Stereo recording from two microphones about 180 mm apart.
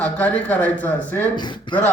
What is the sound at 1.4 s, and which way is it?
Speech, 25° left (ahead or behind).